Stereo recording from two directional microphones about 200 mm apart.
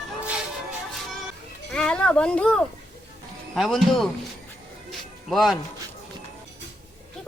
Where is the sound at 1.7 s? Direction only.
5° left (ahead or behind).